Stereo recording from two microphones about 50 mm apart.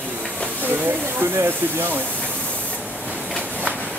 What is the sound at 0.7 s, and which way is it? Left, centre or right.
Speech, right.